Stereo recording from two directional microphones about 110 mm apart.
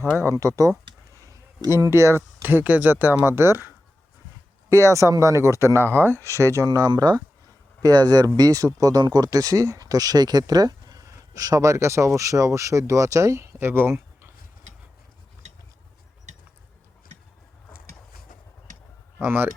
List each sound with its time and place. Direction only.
0.2 s speech: 30° right (ahead or behind)
1.1 s a sound: 30° right (ahead or behind)
2.4 s speech: 15° right (ahead or behind)
4.7 s speech: 30° right (ahead or behind)
6.7 s speech: 35° right (ahead or behind)
19.2 s speech: 20° right (ahead or behind)